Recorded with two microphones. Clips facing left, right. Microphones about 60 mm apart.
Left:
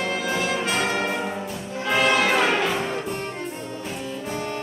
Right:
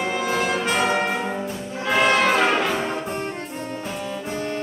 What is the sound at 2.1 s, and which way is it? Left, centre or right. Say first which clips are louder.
Brass instrument: right 2 dB; centre.